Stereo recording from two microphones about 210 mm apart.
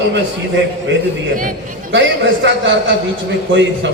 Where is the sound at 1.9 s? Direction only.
60° right (ahead or behind).